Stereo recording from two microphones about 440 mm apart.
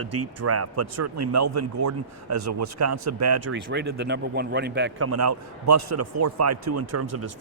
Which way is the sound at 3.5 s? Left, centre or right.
Right.